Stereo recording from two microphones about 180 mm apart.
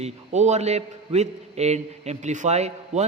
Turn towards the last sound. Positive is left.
turn(degrees=-40)  # may be behind; listen again after turning